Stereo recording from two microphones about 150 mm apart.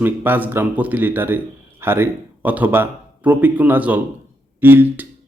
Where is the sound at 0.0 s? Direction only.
15° right (ahead or behind).